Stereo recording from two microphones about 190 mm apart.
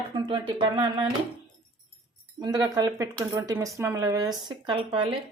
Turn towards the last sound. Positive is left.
turn(degrees=-30)  # may be behind; listen again after turning